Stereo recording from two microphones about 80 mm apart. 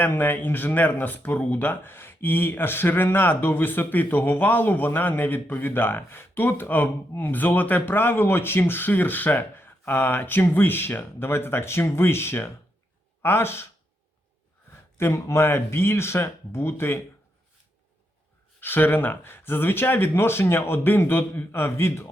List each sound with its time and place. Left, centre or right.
0.0 s speech: left
14.9 s speech: left
18.6 s speech: left